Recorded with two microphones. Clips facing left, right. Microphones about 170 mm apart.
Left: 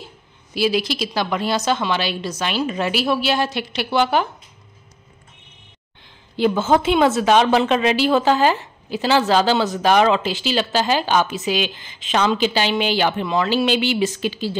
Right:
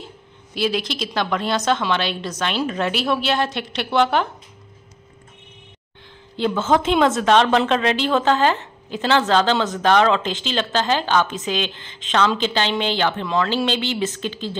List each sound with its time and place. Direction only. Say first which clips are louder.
0.6 s a woman's voice: left 3 dB; 5° left (ahead or behind)
6.3 s a woman's voice: left 2 dB; 10° left (ahead or behind)